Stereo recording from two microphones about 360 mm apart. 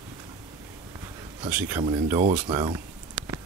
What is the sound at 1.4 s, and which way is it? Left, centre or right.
Speech, centre.